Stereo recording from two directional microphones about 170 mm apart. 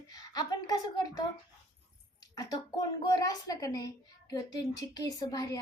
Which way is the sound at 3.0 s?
20° left (ahead or behind).